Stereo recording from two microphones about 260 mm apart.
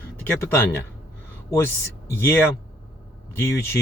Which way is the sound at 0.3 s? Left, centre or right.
Centre.